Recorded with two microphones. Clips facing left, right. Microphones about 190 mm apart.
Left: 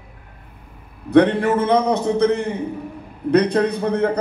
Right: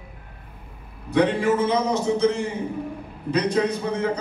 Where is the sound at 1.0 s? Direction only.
60° left (ahead or behind).